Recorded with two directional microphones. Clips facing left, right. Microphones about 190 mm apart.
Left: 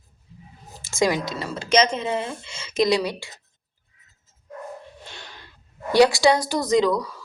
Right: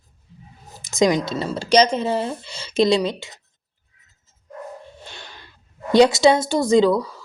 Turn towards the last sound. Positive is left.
turn(degrees=-30)  # may be behind; listen again after turning